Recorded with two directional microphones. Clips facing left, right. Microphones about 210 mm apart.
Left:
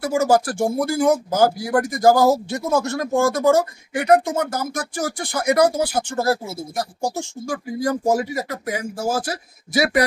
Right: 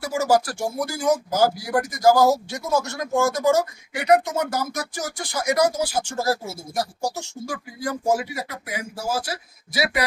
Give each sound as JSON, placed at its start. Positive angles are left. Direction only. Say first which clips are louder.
{"t": 0.0, "sound": "speech", "louder": "left 3 dB", "side_deg": 50}